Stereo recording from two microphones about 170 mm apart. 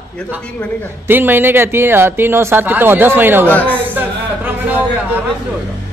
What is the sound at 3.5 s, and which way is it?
Speech, 10° left (ahead or behind).